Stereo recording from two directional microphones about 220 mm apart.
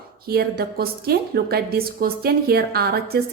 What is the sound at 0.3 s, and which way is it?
A woman's voice, 45° right (ahead or behind).